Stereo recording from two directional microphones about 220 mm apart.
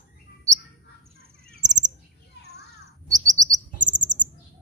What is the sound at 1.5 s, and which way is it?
Bird, 35° right (ahead or behind).